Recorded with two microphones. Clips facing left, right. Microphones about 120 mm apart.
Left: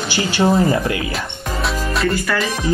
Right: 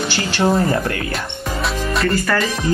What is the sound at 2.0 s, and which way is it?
Speech, centre (ahead or behind).